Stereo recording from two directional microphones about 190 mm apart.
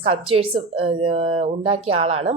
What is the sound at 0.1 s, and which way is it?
Speech, 30° right (ahead or behind).